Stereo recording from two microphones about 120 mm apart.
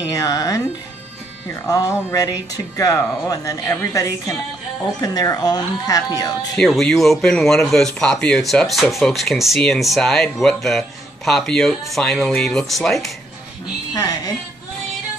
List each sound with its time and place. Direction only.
0.1 s speech: 30° left (ahead or behind)
6.5 s speech: 5° left (ahead or behind)